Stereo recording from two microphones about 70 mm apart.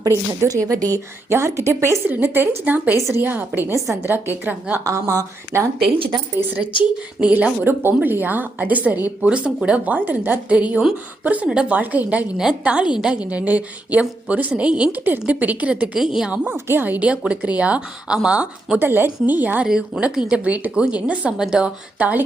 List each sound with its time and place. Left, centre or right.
0.0 s speech: right
1.3 s a woman's voice: right
4.9 s a woman's voice: right
7.2 s speech: centre
7.6 s a woman's voice: right
16.0 s speech: centre
16.5 s a woman's voice: right; by 18.8 s centre
18.8 s a woman's voice: right
19.6 s speech: centre